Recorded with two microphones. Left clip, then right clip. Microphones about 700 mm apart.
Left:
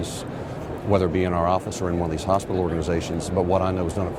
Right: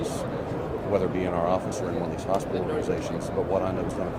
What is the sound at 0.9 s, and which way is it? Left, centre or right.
Speech, left.